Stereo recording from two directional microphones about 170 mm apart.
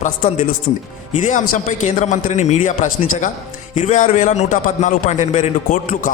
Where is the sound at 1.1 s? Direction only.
45° left (ahead or behind).